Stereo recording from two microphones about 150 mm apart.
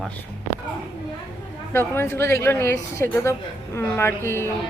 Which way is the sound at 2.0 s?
15° left (ahead or behind).